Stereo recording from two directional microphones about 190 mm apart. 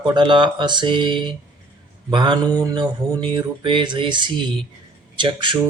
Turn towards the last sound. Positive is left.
turn(degrees=-25)  # may be behind; listen again after turning